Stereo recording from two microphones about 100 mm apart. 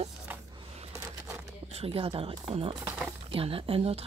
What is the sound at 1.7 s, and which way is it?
Speech, 75° right (ahead or behind).